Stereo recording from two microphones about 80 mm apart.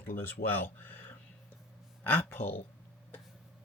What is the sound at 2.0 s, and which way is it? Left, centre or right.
Speech, left.